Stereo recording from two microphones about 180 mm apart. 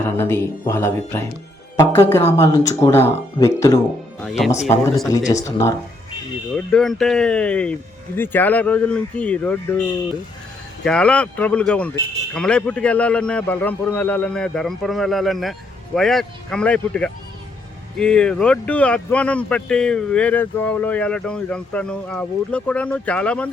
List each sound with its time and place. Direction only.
0.0 s speech: 15° left (ahead or behind)
4.2 s a man's voice: centre (ahead or behind)
5.0 s speech: 20° left (ahead or behind)
6.7 s speech: 5° left (ahead or behind)
10.8 s a man's voice: 5° left (ahead or behind)